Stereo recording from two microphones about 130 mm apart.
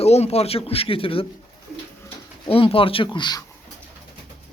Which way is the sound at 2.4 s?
45° left (ahead or behind).